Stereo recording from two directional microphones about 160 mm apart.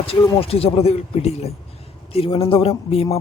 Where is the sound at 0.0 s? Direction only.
35° left (ahead or behind).